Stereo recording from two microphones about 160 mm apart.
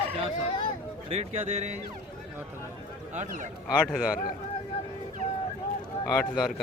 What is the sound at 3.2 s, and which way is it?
Speech, 50° right (ahead or behind).